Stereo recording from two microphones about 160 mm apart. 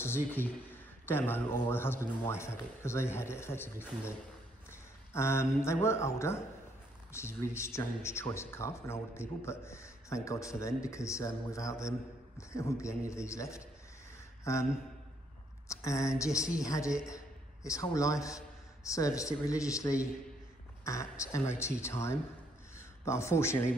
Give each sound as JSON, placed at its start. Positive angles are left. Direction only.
{"t": 0.0, "sound": "a man's voice", "side_deg": 15}
{"t": 15.7, "sound": "a man's voice", "side_deg": 20}